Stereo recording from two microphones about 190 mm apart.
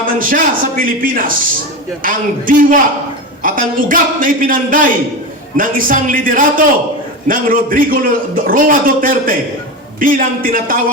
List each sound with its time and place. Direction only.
0.0 s a man's voice: 45° right (ahead or behind)